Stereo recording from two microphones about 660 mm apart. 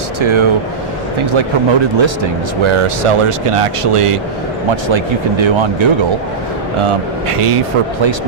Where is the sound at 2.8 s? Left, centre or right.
Right.